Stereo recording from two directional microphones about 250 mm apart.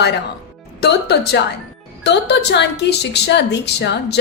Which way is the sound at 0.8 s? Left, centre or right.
Left.